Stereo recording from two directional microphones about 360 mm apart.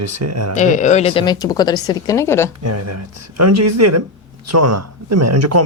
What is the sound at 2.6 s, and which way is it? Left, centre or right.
Speech, right.